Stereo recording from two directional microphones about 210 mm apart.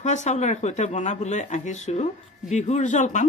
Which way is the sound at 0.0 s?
35° left (ahead or behind).